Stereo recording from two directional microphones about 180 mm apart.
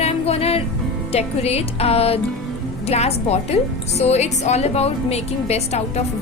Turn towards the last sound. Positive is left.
turn(degrees=35)  # may be behind; listen again after turning